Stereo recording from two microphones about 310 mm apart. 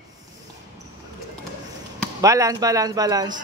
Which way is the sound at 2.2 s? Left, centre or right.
Centre.